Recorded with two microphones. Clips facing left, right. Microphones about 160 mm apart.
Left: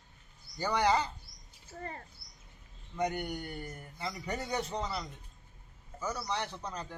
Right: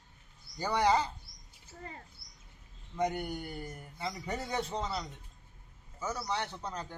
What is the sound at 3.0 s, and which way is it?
Speech, 30° right (ahead or behind).